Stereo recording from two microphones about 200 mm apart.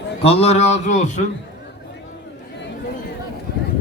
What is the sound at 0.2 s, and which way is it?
A man's voice, 30° left (ahead or behind).